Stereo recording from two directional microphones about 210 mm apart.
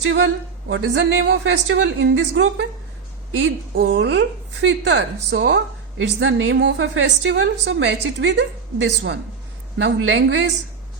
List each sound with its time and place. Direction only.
0.0 s a woman's voice: 65° right (ahead or behind)